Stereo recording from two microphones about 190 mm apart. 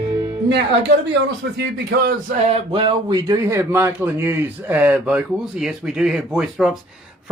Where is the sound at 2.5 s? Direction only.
30° right (ahead or behind).